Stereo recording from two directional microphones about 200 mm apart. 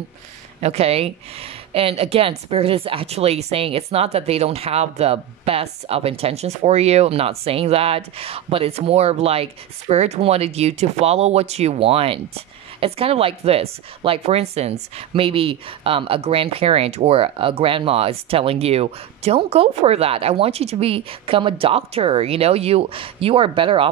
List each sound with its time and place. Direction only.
0.6 s speech: 30° right (ahead or behind)